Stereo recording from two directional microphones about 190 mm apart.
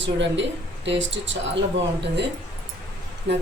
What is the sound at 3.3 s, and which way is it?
Speech, 65° right (ahead or behind).